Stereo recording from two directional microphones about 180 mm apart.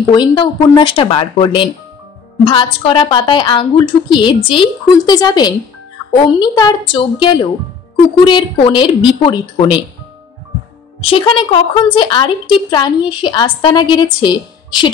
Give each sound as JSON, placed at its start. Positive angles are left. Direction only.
{"t": 0.1, "sound": "a woman's voice", "side_deg": 25}
{"t": 11.0, "sound": "a woman's voice", "side_deg": 30}